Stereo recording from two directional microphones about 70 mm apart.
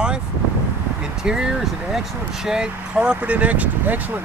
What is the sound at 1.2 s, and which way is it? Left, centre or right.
Speech, centre.